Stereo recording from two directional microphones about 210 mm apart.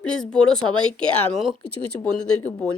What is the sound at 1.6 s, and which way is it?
Speech, 90° left.